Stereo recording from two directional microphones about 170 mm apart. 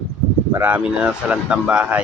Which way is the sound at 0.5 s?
10° right (ahead or behind).